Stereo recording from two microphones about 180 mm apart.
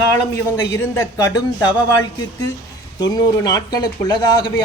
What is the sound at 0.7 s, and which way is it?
Speech, 15° left (ahead or behind).